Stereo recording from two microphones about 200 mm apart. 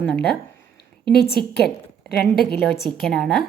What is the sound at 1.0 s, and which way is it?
Speech, 50° left (ahead or behind).